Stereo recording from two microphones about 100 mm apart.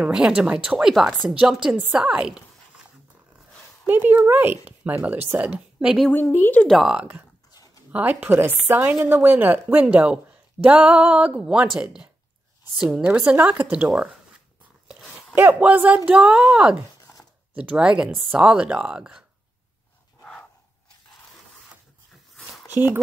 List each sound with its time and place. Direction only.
0.0 s speech: 10° right (ahead or behind)
3.8 s a woman's voice: 20° right (ahead or behind)
6.1 s speech: 20° left (ahead or behind)
6.7 s speech: 5° right (ahead or behind)
7.0 s speech: 20° right (ahead or behind)
7.5 s a sound: 40° left (ahead or behind)
7.9 s speech: 15° right (ahead or behind)
15.3 s speech: 20° right (ahead or behind)
22.4 s a sound: 5° left (ahead or behind)